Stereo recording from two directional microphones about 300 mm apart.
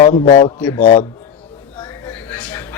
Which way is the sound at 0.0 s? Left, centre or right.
Left.